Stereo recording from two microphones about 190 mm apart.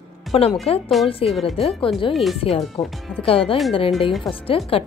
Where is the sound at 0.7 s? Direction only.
30° left (ahead or behind).